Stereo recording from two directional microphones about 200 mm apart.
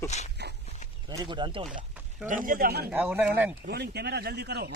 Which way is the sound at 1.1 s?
20° right (ahead or behind).